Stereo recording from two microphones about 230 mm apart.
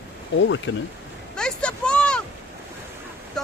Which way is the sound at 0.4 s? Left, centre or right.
Left.